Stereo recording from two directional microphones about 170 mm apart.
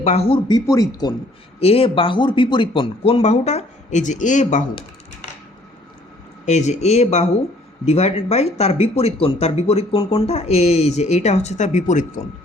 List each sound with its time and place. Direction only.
0.0 s speech: 40° left (ahead or behind); by 1.1 s 20° left (ahead or behind)
1.5 s speech: 35° left (ahead or behind)
6.4 s speech: 45° left (ahead or behind)